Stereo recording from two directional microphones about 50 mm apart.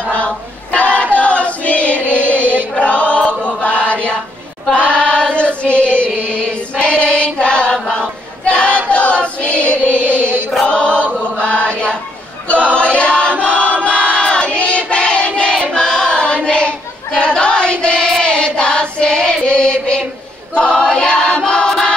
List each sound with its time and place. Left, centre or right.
0.0 s a sound: left
2.8 s choir: left
3.2 s chant: left
4.7 s female singing: left
8.5 s choir: left
10.7 s chant: left
12.4 s choir: left
16.4 s child singing: left
20.5 s choir: centre